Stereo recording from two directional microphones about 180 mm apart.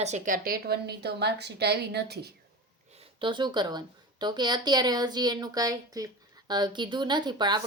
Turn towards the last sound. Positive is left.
turn(degrees=-25)  # may be behind; listen again after turning